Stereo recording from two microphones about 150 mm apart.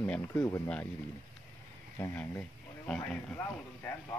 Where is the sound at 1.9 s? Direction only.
15° left (ahead or behind).